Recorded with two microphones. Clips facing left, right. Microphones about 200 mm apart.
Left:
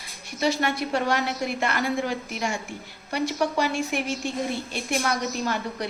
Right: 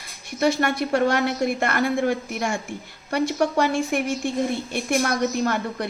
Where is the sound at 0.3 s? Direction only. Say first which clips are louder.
Right 3 dB; 50° right (ahead or behind).